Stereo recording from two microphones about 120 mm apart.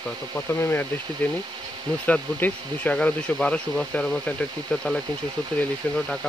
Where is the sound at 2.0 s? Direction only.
15° left (ahead or behind).